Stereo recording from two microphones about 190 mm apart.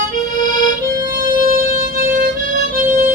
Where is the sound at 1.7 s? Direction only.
45° right (ahead or behind).